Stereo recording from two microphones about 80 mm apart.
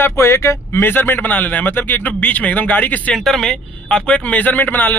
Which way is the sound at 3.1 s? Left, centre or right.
Centre.